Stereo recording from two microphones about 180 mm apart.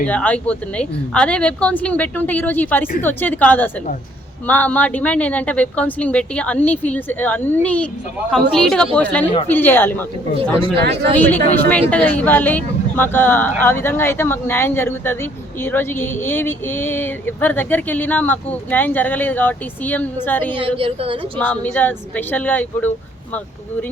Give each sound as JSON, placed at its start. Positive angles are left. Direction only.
{"t": 0.0, "sound": "speech", "side_deg": 5}
{"t": 10.8, "sound": "speech", "side_deg": -65}
{"t": 11.2, "sound": "speech", "side_deg": 10}
{"t": 20.6, "sound": "a woman's voice", "side_deg": -30}
{"t": 21.3, "sound": "speech", "side_deg": 10}